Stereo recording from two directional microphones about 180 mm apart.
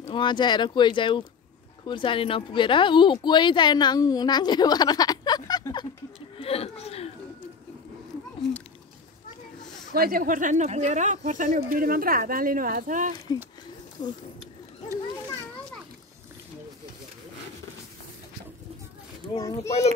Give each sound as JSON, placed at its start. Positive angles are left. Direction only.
{"t": 0.0, "sound": "speech", "side_deg": 25}
{"t": 6.3, "sound": "a sound", "side_deg": 35}
{"t": 9.9, "sound": "speech", "side_deg": -55}
{"t": 19.3, "sound": "speech", "side_deg": 20}